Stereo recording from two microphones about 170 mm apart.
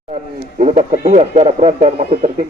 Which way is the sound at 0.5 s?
45° right (ahead or behind).